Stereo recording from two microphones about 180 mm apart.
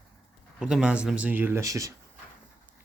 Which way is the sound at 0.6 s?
5° right (ahead or behind).